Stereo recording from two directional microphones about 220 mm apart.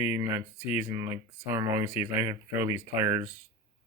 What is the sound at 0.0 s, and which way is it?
Speech, 10° right (ahead or behind).